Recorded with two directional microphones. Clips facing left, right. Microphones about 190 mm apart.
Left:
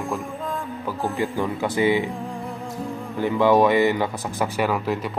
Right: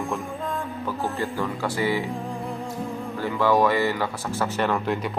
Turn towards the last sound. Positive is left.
turn(degrees=0)  # may be behind; listen again after turning